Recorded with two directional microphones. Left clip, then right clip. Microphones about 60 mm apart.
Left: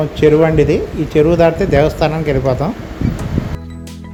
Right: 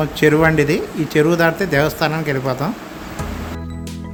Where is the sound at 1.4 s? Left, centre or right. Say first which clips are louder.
Left 4 dB; left.